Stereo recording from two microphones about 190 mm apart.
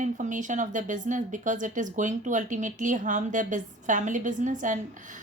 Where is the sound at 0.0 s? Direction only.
40° right (ahead or behind).